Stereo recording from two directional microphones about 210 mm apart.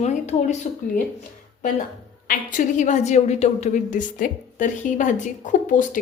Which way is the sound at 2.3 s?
35° left (ahead or behind).